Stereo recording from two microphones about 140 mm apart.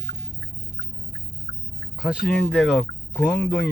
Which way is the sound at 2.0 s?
5° right (ahead or behind).